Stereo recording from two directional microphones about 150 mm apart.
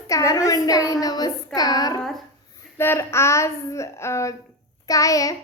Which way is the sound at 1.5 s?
25° left (ahead or behind).